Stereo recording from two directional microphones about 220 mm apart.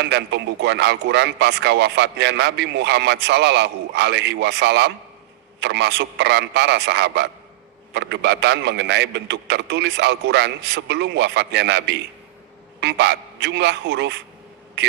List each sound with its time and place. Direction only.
0.0 s a man's voice: 50° right (ahead or behind)